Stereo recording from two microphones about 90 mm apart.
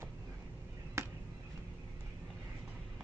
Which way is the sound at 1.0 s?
30° right (ahead or behind).